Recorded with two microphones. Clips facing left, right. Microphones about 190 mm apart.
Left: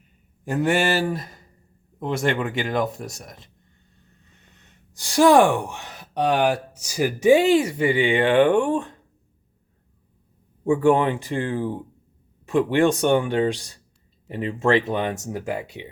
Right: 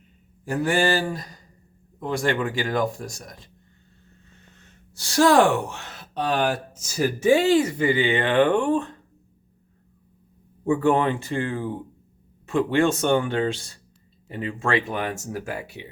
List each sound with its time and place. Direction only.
0.4 s speech: 20° left (ahead or behind)
3.0 s speech: centre (ahead or behind)
4.9 s speech: 15° left (ahead or behind)
10.6 s speech: 15° left (ahead or behind)